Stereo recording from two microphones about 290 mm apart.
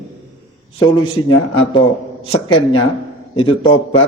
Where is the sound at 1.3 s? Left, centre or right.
Centre.